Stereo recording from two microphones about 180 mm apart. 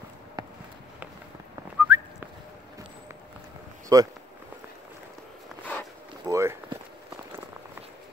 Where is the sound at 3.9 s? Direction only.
20° right (ahead or behind).